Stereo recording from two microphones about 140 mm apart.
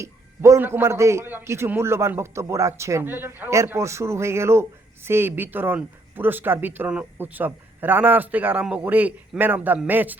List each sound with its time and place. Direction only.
0.0 s a man's voice: 20° right (ahead or behind)